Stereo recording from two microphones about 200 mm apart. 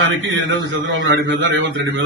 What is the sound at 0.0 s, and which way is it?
A man's voice, 70° right (ahead or behind).